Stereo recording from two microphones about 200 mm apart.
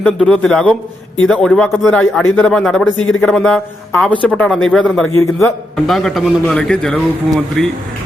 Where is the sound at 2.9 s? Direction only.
80° left.